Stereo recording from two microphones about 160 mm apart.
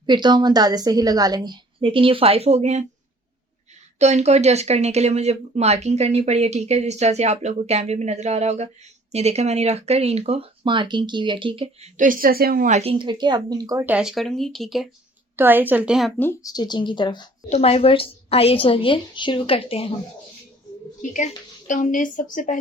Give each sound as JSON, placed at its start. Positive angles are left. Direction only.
{"t": 0.0, "sound": "a woman's voice", "side_deg": -30}
{"t": 3.9, "sound": "speech", "side_deg": -45}
{"t": 11.9, "sound": "speech", "side_deg": -60}
{"t": 12.7, "sound": "a woman's voice", "side_deg": -35}
{"t": 13.8, "sound": "speech", "side_deg": -5}
{"t": 15.4, "sound": "a woman's voice", "side_deg": -10}
{"t": 16.1, "sound": "speech", "side_deg": 10}
{"t": 16.5, "sound": "speech", "side_deg": 25}
{"t": 17.5, "sound": "a woman's voice", "side_deg": 40}
{"t": 21.0, "sound": "speech", "side_deg": 55}